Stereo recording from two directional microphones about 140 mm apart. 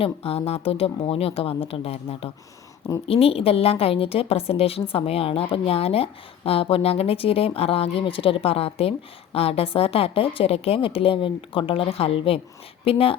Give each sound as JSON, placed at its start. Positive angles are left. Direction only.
{"t": 0.0, "sound": "a woman's voice", "side_deg": 45}